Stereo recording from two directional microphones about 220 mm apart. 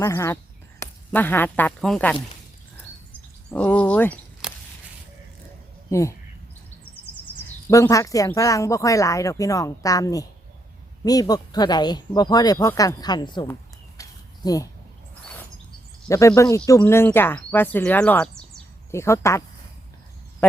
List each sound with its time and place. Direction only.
0.0 s speech: 15° left (ahead or behind)
3.5 s speech: 5° left (ahead or behind)
5.9 s speech: 15° left (ahead or behind)
7.7 s speech: 15° left (ahead or behind)
14.0 s a sound: 15° left (ahead or behind)
16.0 s speech: 15° left (ahead or behind)
20.4 s speech: 10° left (ahead or behind)